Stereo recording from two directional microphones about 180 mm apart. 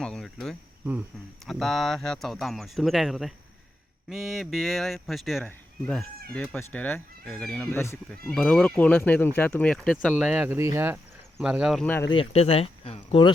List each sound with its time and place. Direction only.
0.0 s cricket: centre (ahead or behind)
1.5 s speech: centre (ahead or behind)
12.0 s speech: 30° left (ahead or behind)